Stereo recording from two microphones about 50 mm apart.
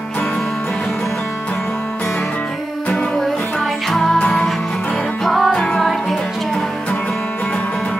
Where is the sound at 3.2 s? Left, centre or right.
Centre.